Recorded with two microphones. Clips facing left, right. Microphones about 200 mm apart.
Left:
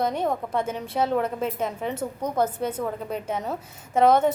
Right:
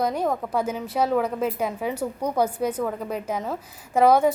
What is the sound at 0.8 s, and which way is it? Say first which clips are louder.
Speech: right 1 dB; 25° left (ahead or behind).